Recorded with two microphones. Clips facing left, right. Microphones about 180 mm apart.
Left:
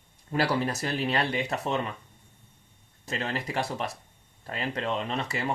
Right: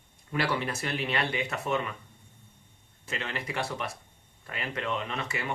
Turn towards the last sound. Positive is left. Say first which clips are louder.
# left 4 dB
turn(degrees=35)  # may be behind; listen again after turning